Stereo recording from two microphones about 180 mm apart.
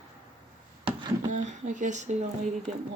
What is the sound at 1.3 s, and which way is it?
Speech, 40° right (ahead or behind).